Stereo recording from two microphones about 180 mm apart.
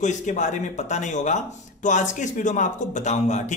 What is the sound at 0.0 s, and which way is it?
A man's voice, 40° left (ahead or behind).